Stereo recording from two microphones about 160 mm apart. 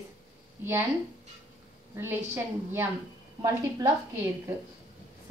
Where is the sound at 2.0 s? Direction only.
15° right (ahead or behind).